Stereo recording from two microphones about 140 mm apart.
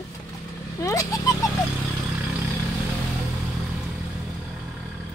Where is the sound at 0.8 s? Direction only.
25° left (ahead or behind).